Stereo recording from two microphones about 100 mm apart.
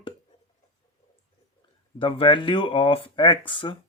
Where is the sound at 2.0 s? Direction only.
60° left (ahead or behind).